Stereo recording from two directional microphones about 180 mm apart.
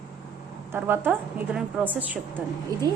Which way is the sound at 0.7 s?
10° right (ahead or behind).